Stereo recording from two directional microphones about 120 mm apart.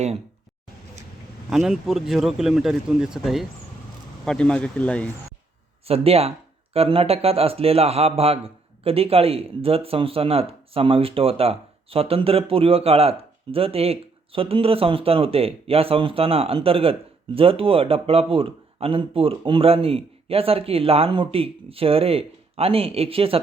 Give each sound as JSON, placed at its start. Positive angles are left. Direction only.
{"t": 1.5, "sound": "speech", "side_deg": -5}
{"t": 4.3, "sound": "speech", "side_deg": 5}
{"t": 5.8, "sound": "speech", "side_deg": -55}